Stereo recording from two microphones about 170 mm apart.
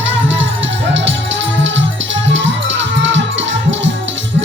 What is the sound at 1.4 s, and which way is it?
Music, 90° right.